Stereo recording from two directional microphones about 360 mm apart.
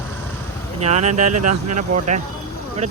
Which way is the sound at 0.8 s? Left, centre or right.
Centre.